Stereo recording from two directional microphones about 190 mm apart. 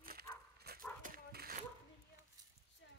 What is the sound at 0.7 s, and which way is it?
Dog, 55° right (ahead or behind).